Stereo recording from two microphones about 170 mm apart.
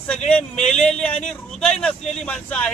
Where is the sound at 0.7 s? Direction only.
5° left (ahead or behind).